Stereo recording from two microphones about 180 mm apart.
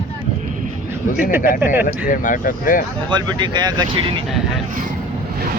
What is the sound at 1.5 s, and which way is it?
Speech, 10° right (ahead or behind).